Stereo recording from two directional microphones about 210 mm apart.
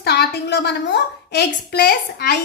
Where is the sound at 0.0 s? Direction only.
50° left (ahead or behind).